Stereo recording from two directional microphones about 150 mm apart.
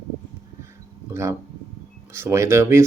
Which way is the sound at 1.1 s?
20° right (ahead or behind).